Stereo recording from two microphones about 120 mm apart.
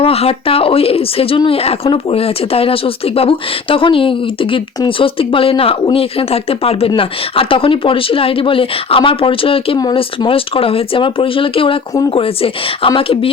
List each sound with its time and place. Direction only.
0.0 s speech: 55° left (ahead or behind)